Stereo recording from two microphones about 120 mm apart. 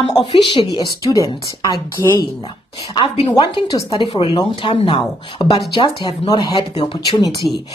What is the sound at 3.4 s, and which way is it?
A woman's voice, 40° left (ahead or behind).